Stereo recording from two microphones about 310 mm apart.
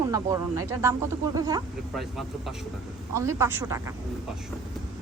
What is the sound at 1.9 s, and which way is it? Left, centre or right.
A woman's voice, centre.